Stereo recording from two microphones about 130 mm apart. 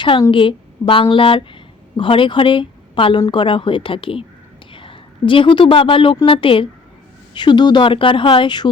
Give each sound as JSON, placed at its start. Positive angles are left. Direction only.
{"t": 0.0, "sound": "speech", "side_deg": 40}